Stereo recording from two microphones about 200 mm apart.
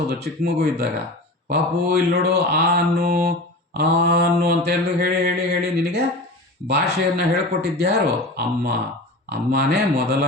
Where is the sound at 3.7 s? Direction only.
55° right (ahead or behind).